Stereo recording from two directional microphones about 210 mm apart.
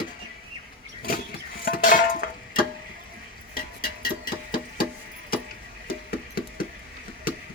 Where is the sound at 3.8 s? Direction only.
45° left (ahead or behind).